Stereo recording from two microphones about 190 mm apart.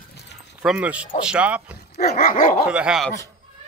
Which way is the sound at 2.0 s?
55° left (ahead or behind).